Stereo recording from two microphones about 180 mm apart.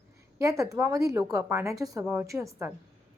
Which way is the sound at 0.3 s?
20° right (ahead or behind).